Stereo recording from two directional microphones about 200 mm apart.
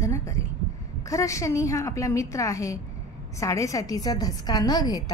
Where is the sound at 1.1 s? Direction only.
15° left (ahead or behind).